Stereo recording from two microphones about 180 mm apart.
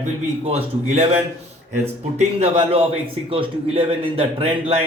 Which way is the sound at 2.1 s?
35° right (ahead or behind).